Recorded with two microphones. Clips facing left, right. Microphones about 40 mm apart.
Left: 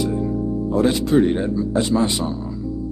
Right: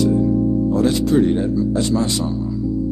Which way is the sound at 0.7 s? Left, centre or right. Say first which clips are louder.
Left 2 dB; centre.